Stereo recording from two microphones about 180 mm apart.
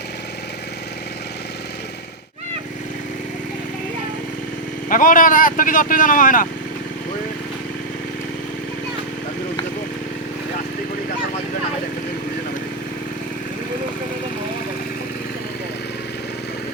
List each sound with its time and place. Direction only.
4.9 s speech: 50° left (ahead or behind)